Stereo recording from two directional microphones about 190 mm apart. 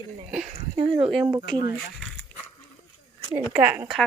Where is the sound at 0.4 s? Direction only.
30° right (ahead or behind).